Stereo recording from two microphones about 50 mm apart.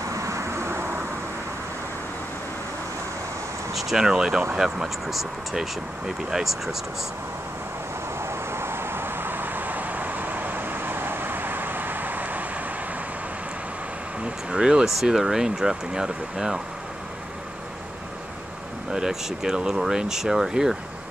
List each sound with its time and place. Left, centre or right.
0.0 s vehicle: right
3.7 s speech: centre
8.2 s vehicle: right
14.2 s air conditioning: centre
15.0 s speech: centre
18.9 s speech: centre